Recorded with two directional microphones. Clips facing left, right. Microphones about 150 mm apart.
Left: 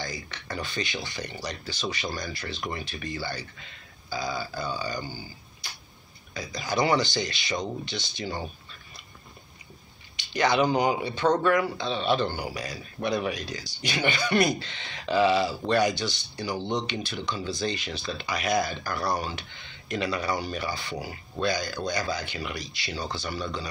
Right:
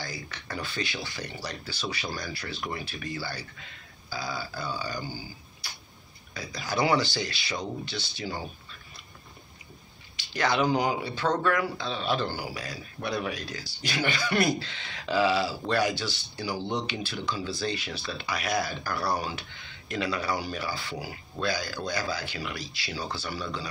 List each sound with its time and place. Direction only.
0.0 s a man's voice: 5° right (ahead or behind)
6.3 s a man's voice: 5° right (ahead or behind)
10.1 s a man's voice: centre (ahead or behind)